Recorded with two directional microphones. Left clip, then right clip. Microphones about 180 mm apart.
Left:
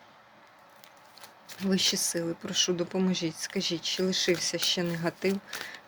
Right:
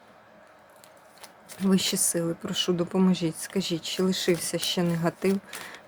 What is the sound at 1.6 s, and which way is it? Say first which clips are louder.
Speech: right 1 dB; 25° right (ahead or behind).